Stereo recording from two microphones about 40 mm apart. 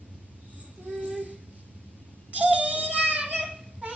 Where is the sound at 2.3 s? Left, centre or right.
Right.